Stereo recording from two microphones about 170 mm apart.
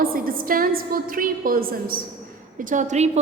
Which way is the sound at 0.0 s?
60° right (ahead or behind).